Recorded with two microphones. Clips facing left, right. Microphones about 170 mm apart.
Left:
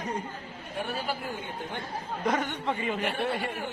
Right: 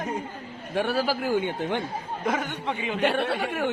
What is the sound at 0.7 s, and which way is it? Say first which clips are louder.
A man's voice: right 8 dB; 90° right.